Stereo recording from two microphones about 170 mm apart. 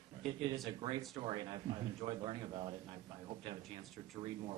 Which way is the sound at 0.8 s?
25° right (ahead or behind).